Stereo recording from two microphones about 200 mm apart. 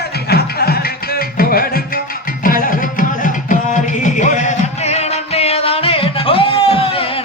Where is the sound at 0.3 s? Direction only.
50° left (ahead or behind).